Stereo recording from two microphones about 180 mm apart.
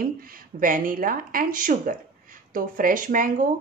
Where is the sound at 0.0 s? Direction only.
50° right (ahead or behind).